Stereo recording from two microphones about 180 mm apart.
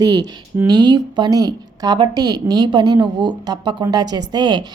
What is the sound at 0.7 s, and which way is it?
A woman's voice, 25° right (ahead or behind).